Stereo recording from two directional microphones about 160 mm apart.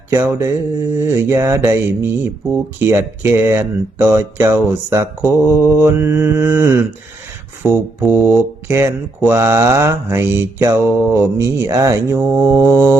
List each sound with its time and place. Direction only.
0.1 s mantra: 20° right (ahead or behind)
0.9 s speech: 15° right (ahead or behind)